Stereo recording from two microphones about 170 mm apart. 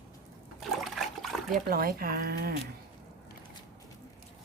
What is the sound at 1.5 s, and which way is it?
Speech, 60° right (ahead or behind).